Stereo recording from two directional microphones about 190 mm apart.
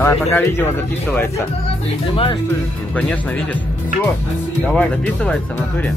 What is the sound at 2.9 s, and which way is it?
Speech, 10° left (ahead or behind).